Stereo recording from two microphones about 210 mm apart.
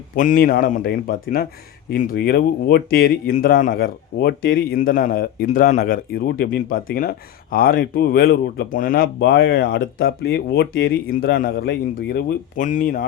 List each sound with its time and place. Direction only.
0.2 s a man's voice: 40° left (ahead or behind)